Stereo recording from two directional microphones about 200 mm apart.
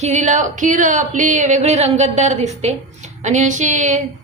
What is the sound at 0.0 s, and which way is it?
A woman's voice, 35° right (ahead or behind).